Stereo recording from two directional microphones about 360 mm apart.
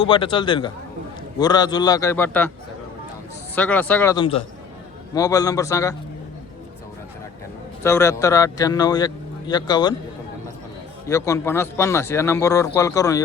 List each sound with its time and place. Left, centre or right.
0.1 s speech: centre
3.5 s speech: centre
7.9 s speech: centre
11.0 s speech: centre